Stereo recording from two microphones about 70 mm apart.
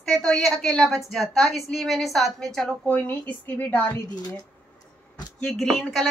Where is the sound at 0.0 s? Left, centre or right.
Centre.